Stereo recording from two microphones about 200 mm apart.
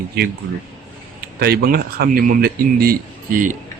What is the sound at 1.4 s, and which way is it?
Speech, 50° right (ahead or behind).